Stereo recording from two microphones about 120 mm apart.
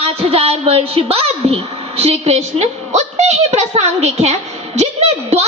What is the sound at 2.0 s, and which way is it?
A woman's voice, 55° right (ahead or behind).